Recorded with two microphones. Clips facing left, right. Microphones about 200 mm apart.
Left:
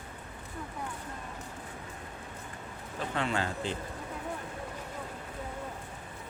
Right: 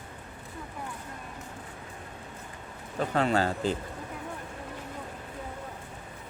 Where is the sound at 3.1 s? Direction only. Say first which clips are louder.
Right 6 dB; 40° right (ahead or behind).